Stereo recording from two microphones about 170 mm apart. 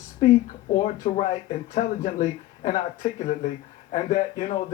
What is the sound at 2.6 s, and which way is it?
Speech, 50° left (ahead or behind).